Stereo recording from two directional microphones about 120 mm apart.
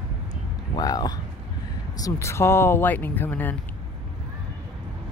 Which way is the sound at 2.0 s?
25° left (ahead or behind).